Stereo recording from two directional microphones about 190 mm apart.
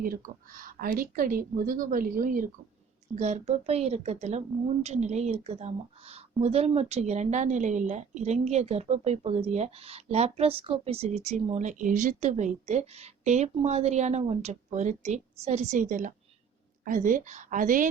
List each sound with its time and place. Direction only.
0.0 s a woman's voice: 45° right (ahead or behind)